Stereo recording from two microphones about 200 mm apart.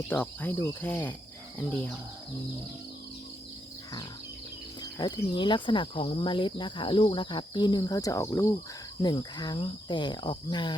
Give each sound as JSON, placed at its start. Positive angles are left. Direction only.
{"t": 0.1, "sound": "cricket", "side_deg": 10}
{"t": 4.8, "sound": "speech", "side_deg": 20}